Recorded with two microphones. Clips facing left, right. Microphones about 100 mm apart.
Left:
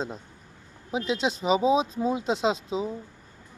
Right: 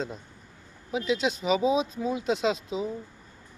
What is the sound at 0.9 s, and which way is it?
Speech, 30° left (ahead or behind).